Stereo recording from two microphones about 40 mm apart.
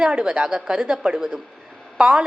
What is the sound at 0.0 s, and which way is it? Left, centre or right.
A woman's voice, right.